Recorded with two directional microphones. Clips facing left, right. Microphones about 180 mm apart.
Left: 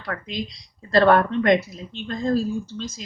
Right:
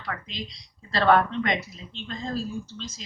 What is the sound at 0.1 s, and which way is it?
Speech, 50° left (ahead or behind).